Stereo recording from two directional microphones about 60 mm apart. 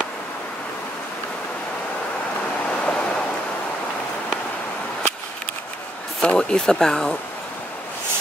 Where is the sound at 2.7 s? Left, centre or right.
Centre.